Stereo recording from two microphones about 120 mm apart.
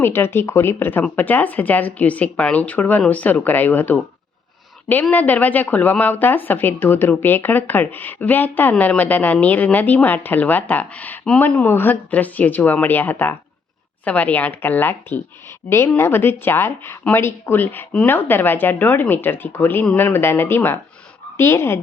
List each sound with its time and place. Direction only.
0.0 s speech: 20° left (ahead or behind)
5.1 s speech: 15° left (ahead or behind)